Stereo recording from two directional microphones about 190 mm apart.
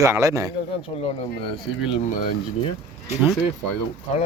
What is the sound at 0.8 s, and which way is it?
Speech, 30° left (ahead or behind).